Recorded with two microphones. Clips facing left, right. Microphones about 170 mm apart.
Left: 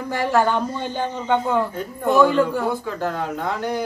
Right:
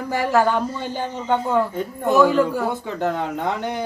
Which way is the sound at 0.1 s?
5° right (ahead or behind).